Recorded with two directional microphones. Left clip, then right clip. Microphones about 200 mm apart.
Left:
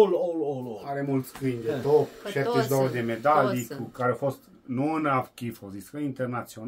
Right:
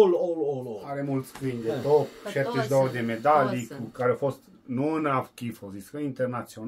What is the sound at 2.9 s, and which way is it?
Speech, 15° left (ahead or behind).